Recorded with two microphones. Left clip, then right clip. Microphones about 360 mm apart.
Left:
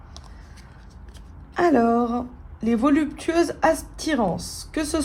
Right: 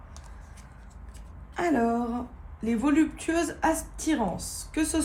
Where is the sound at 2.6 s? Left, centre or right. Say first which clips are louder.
Left 4 dB; left.